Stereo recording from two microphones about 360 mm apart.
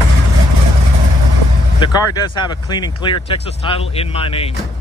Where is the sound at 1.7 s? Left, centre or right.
Centre.